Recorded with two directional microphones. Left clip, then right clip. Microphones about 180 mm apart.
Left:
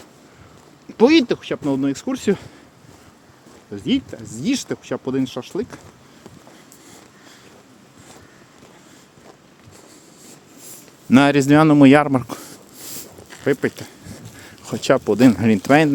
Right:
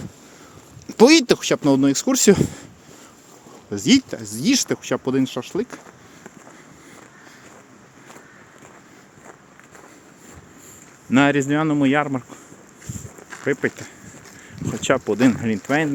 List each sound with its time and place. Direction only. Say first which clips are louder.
0.9 s a sound: right 1 dB; 30° right (ahead or behind)
1.3 s speech: right 5 dB; 35° right (ahead or behind)
3.7 s speech: right 5 dB; 30° right (ahead or behind)
4.3 s speech: right 3 dB; 15° right (ahead or behind)
11.1 s speech: left 4 dB; 40° left (ahead or behind)
13.4 s speech: left 2 dB; 25° left (ahead or behind)